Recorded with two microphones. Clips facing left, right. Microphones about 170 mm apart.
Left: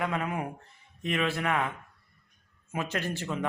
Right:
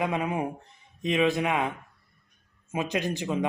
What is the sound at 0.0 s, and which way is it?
Speech, 20° right (ahead or behind).